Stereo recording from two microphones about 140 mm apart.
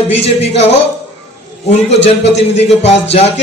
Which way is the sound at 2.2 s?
50° left (ahead or behind).